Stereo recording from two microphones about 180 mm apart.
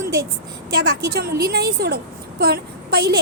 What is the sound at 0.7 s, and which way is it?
A woman's voice, 55° right (ahead or behind).